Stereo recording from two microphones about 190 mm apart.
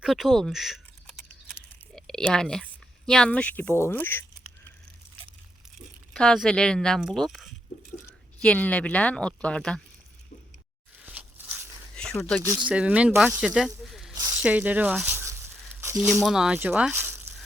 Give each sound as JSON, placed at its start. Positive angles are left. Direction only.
{"t": 0.0, "sound": "typing", "side_deg": 0}
{"t": 2.0, "sound": "speech", "side_deg": 5}
{"t": 6.1, "sound": "speech", "side_deg": 5}
{"t": 11.0, "sound": "a sound", "side_deg": -10}
{"t": 11.9, "sound": "a sound", "side_deg": 5}
{"t": 12.4, "sound": "speech", "side_deg": -10}
{"t": 13.8, "sound": "snake", "side_deg": 0}
{"t": 14.2, "sound": "snake", "side_deg": -15}
{"t": 14.4, "sound": "speech", "side_deg": -10}
{"t": 15.8, "sound": "squish", "side_deg": -15}
{"t": 16.2, "sound": "speech", "side_deg": -5}